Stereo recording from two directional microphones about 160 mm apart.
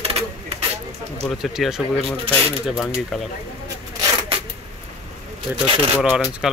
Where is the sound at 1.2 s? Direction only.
Centre (ahead or behind).